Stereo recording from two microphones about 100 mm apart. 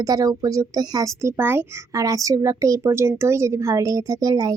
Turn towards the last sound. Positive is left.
turn(degrees=-35)  # may be behind; listen again after turning